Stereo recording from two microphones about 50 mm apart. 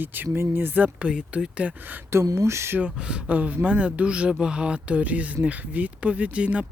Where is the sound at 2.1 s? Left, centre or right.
Right.